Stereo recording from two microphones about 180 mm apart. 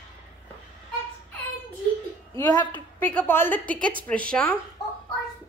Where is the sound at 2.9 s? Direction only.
10° left (ahead or behind).